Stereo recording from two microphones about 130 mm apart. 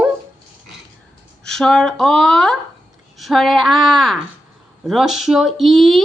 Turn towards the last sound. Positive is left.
turn(degrees=0)  # may be behind; listen again after turning